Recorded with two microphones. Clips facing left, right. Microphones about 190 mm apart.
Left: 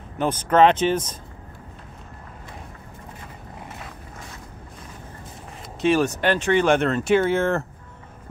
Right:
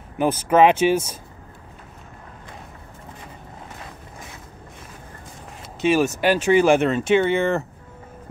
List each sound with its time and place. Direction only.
0.2 s speech: 10° right (ahead or behind)
5.8 s speech: 5° right (ahead or behind)